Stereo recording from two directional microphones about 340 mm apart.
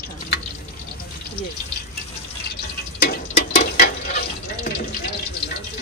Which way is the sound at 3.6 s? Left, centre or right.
Left.